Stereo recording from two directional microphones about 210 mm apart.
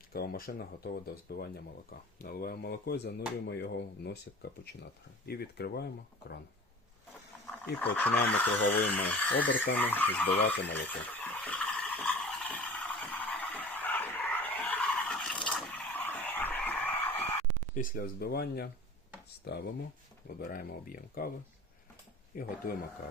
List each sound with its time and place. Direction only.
0.1 s speech: 45° left (ahead or behind)
5.2 s speech: 50° left (ahead or behind)
7.6 s speech: 5° left (ahead or behind)
10.8 s a sound: 10° left (ahead or behind)
17.7 s speech: 40° left (ahead or behind)
20.2 s speech: 45° left (ahead or behind)
22.4 s speech: 45° left (ahead or behind)